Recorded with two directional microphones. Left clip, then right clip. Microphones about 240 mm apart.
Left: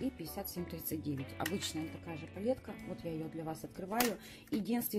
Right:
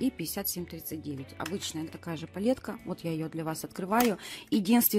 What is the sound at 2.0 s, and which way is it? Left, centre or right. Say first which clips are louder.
Speech: right 7 dB; right.